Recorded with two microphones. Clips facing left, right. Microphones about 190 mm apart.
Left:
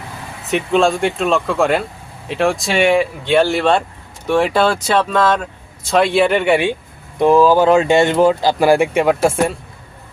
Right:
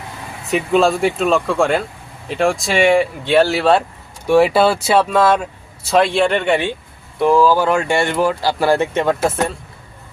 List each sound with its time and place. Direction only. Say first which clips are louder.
0.5 s speech: even; centre (ahead or behind)